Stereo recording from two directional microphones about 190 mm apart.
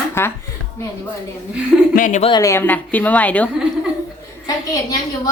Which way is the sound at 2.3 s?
15° left (ahead or behind).